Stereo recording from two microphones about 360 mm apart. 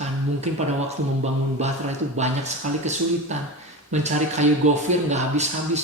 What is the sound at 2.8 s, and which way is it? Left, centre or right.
Speech, centre.